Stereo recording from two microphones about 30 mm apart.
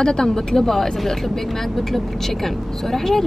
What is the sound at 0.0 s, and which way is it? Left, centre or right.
A woman's voice, left.